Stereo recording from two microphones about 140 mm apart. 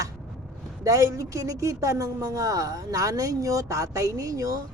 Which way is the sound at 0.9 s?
25° right (ahead or behind).